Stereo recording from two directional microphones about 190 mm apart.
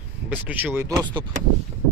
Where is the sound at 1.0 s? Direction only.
25° right (ahead or behind).